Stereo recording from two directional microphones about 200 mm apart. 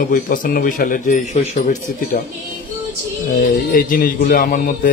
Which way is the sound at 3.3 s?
45° left (ahead or behind).